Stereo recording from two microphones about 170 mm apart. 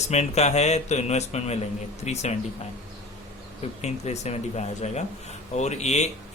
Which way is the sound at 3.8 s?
40° left (ahead or behind).